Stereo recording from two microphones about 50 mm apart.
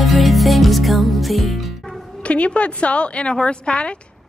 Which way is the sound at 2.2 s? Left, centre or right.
Left.